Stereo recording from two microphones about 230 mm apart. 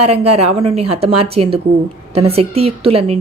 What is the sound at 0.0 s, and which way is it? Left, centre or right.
A woman's voice, right.